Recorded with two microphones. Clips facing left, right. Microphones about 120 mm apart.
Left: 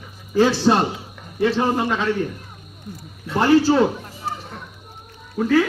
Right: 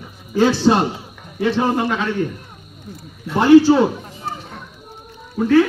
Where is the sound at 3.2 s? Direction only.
5° right (ahead or behind).